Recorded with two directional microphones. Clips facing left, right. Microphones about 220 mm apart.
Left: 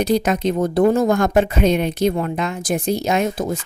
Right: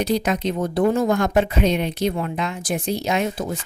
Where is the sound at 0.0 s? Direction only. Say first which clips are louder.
Left 3 dB; 45° left (ahead or behind).